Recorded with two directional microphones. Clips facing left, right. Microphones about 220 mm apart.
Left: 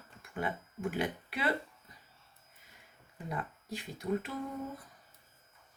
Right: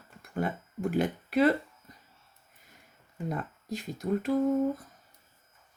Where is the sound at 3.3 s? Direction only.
40° right (ahead or behind).